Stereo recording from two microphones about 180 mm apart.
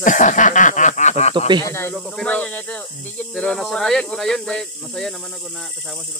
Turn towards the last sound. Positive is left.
turn(degrees=0)  # may be behind; listen again after turning